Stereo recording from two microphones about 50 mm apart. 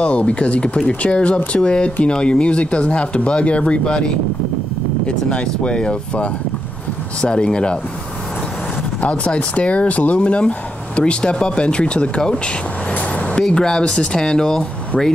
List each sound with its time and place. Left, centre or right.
0.0 s speech: left
5.0 s speech: centre
9.0 s speech: left
12.9 s a sound: left
13.4 s speech: centre